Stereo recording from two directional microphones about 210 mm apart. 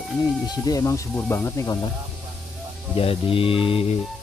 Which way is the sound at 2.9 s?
25° left (ahead or behind).